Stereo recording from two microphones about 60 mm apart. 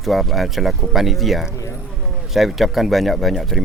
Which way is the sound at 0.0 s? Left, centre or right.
Centre.